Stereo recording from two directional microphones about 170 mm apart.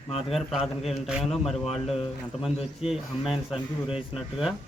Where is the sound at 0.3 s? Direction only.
Centre (ahead or behind).